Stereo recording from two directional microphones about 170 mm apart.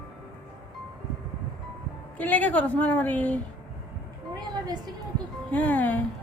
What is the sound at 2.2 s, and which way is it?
A woman's voice, 10° left (ahead or behind).